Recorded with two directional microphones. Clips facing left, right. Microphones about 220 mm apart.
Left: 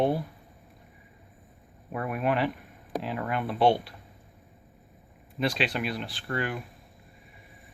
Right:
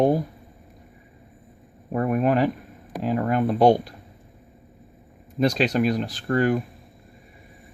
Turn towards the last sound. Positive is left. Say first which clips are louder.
# right 10 dB
turn(degrees=-45)  # may be behind; listen again after turning